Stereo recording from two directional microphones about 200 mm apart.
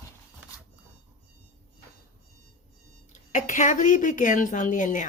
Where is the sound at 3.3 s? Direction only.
40° left (ahead or behind).